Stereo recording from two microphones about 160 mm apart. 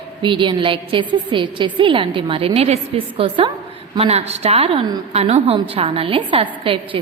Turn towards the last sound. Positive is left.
turn(degrees=-35)  # may be behind; listen again after turning